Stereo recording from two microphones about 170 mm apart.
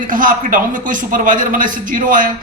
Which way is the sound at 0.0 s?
50° right (ahead or behind).